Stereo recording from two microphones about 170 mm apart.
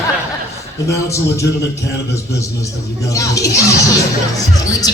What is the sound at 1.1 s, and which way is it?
Music, 15° left (ahead or behind).